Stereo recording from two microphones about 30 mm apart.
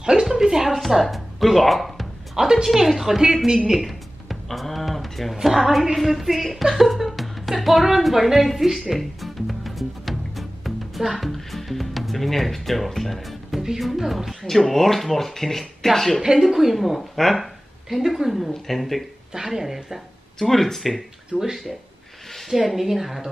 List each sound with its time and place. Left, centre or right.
0.0 s a sound: right
0.7 s a woman's voice: centre
2.3 s speech: centre
3.4 s speech: centre
3.8 s a woman's voice: centre
8.9 s music: centre
13.7 s a woman's voice: centre
14.5 s speech: centre
16.3 s a woman's voice: centre
19.3 s speech: centre
20.3 s speech: centre
21.3 s speech: left
22.5 s speech: centre